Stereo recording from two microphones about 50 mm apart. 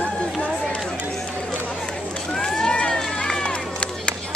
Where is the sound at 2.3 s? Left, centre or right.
Centre.